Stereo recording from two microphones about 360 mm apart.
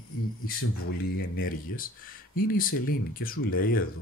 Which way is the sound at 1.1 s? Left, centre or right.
Left.